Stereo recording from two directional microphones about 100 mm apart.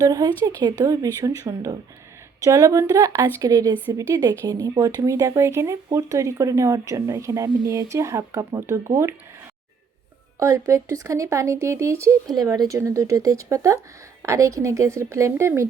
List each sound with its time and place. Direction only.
0.0 s speech: 35° right (ahead or behind)
4.4 s speech: 40° right (ahead or behind)
10.4 s speech: 30° right (ahead or behind)